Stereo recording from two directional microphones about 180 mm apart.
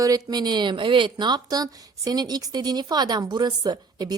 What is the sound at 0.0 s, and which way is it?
A woman's voice, 20° right (ahead or behind).